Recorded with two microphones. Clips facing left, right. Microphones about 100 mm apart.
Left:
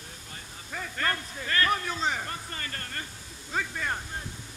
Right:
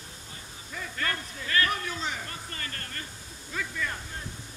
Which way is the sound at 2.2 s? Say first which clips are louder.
Left 2 dB; 30° left (ahead or behind).